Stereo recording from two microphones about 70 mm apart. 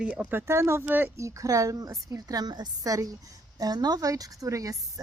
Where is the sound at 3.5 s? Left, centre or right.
Right.